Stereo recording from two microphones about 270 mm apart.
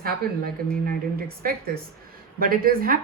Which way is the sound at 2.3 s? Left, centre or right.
Right.